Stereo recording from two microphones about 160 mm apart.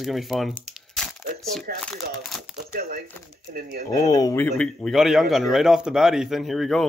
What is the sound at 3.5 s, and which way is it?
Speech, 70° right (ahead or behind).